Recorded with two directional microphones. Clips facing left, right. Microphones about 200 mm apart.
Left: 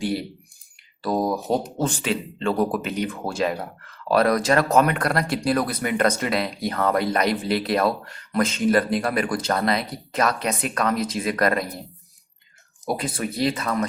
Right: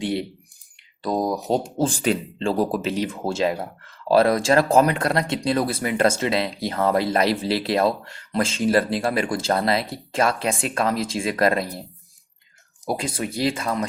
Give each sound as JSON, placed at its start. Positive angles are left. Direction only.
{"t": 0.0, "sound": "speech", "side_deg": -25}
{"t": 1.5, "sound": "speech", "side_deg": -30}
{"t": 13.0, "sound": "speech", "side_deg": -25}